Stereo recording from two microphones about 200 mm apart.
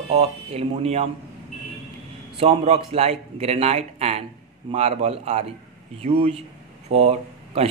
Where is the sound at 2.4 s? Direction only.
30° right (ahead or behind).